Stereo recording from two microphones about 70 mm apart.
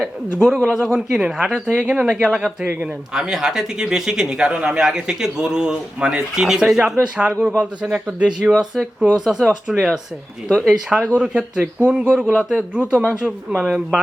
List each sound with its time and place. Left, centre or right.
0.3 s speech: centre
12.2 s a man's voice: centre
12.5 s speech: centre